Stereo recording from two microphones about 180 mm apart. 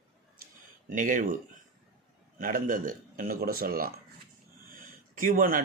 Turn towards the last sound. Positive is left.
turn(degrees=-50)  # may be behind; listen again after turning